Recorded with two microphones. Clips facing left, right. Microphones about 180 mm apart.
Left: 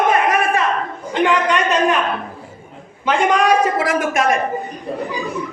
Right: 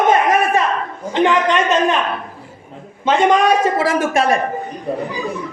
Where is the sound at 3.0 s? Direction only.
25° right (ahead or behind).